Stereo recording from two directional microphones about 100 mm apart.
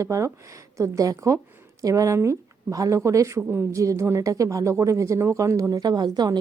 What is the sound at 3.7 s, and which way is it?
Speech, 30° right (ahead or behind).